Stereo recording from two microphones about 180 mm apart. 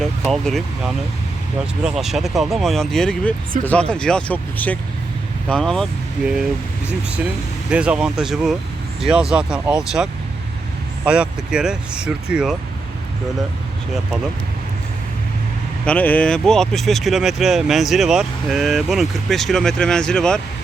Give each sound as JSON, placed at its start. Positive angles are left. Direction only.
{"t": 0.0, "sound": "speech", "side_deg": 0}
{"t": 7.7, "sound": "speech", "side_deg": -5}
{"t": 15.9, "sound": "speech", "side_deg": 10}